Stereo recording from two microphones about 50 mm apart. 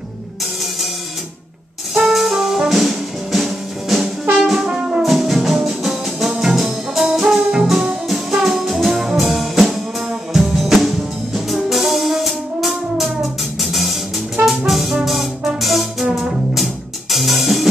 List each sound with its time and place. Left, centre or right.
2.0 s music: centre
4.4 s brass instrument: centre
4.6 s brass instrument: centre
5.0 s music: centre
7.6 s music: centre